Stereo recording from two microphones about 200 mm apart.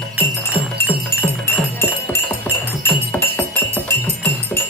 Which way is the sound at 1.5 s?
10° left (ahead or behind).